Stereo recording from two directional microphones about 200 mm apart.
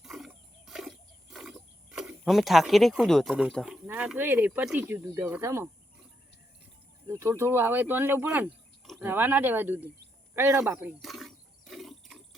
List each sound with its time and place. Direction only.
0.0 s wild animals: centre (ahead or behind)
3.8 s speech: 5° right (ahead or behind)
7.1 s speech: 15° right (ahead or behind)
10.3 s a sound: 10° right (ahead or behind)